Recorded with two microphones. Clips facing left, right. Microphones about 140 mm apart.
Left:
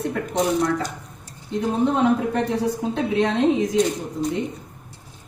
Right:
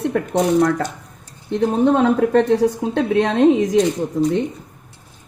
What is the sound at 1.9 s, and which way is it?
Speech, 90° right.